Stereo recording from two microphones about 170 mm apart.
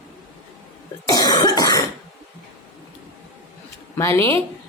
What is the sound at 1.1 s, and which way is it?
Cough, 25° left (ahead or behind).